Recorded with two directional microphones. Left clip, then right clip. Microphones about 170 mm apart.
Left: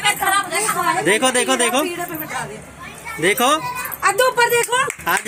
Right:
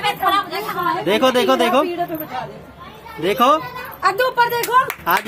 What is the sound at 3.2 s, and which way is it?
Speech, 10° left (ahead or behind).